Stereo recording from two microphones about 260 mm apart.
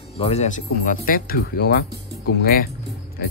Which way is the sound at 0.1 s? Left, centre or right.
Left.